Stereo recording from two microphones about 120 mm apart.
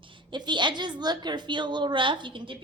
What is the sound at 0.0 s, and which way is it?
A woman's voice, 40° right (ahead or behind).